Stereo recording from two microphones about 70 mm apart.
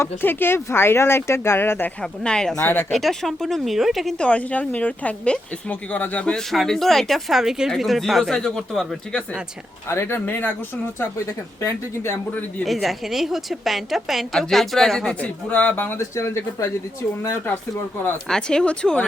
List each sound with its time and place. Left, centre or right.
0.0 s speech: left
2.0 s a woman's voice: centre
4.2 s a woman's voice: centre
6.5 s a woman's voice: centre
9.9 s speech: left
12.6 s a woman's voice: centre
15.2 s a woman's voice: left
16.0 s speech: left
18.3 s speech: centre